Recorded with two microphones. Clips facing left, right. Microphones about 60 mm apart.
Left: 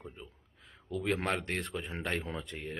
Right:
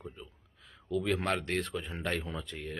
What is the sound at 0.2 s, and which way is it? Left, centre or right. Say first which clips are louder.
Speech: even; centre.